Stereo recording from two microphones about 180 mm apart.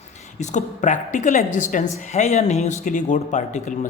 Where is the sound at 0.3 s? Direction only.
40° left (ahead or behind).